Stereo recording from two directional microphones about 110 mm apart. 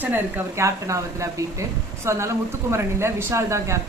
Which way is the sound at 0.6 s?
30° right (ahead or behind).